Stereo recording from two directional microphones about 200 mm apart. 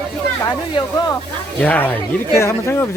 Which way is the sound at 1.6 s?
10° left (ahead or behind).